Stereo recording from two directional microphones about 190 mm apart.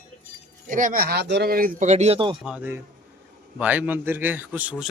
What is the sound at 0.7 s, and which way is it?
Speech, 45° right (ahead or behind).